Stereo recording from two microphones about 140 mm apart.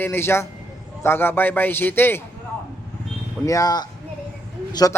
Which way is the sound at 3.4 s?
25° left (ahead or behind).